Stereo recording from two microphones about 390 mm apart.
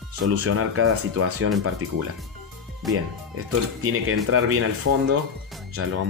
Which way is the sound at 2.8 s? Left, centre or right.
Centre.